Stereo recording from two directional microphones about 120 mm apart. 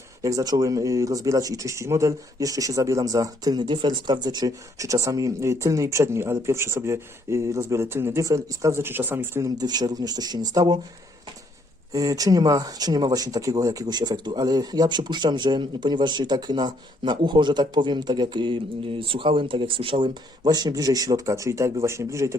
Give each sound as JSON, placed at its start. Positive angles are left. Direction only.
{"t": 0.2, "sound": "speech", "side_deg": -30}
{"t": 9.6, "sound": "speech", "side_deg": -35}
{"t": 11.9, "sound": "speech", "side_deg": -30}